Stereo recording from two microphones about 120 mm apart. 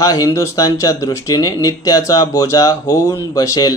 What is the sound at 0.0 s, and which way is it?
A man's voice, 30° left (ahead or behind).